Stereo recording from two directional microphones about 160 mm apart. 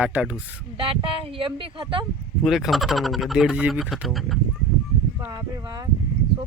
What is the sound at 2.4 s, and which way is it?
Speech, centre (ahead or behind).